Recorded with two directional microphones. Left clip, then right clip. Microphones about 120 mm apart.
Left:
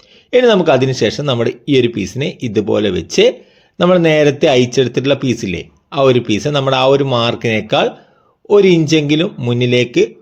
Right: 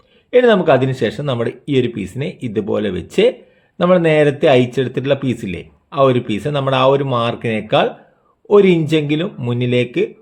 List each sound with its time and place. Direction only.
0.3 s speech: 35° left (ahead or behind)